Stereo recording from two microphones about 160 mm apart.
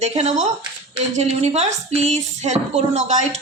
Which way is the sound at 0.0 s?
40° right (ahead or behind).